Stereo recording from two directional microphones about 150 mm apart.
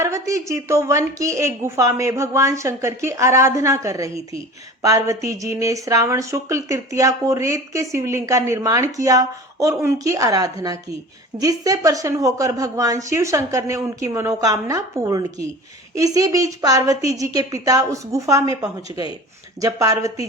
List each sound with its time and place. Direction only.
0.0 s a woman's voice: 20° right (ahead or behind)